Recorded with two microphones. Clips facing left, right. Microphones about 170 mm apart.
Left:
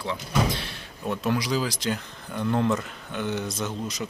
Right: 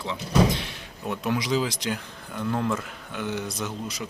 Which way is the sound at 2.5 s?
5° left (ahead or behind).